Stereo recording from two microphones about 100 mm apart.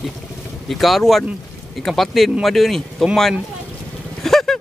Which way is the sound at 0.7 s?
Centre (ahead or behind).